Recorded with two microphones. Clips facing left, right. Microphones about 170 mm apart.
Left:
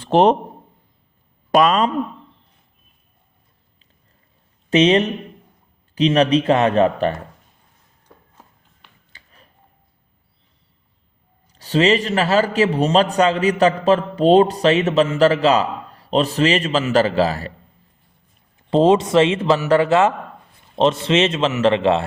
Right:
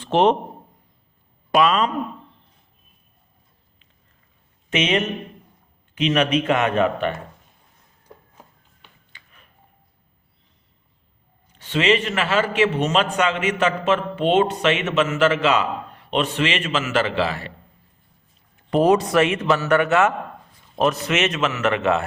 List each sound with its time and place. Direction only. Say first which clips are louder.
0.0 s a man's voice: left 3 dB; 40° left (ahead or behind)
1.5 s speech: left 3 dB; 40° left (ahead or behind)
4.7 s a man's voice: left 7 dB; 35° left (ahead or behind)
9.1 s a sound: left 2 dB; 35° left (ahead or behind)
11.4 s a man's voice: left 4 dB; 35° left (ahead or behind)
18.7 s a man's voice: left 3 dB; 25° left (ahead or behind)